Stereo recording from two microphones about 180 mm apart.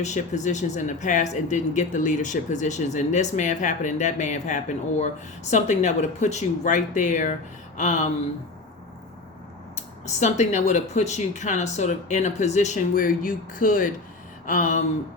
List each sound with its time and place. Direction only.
0.0 s speech: 40° left (ahead or behind)
10.1 s speech: 40° left (ahead or behind)
14.4 s a sound: 45° left (ahead or behind)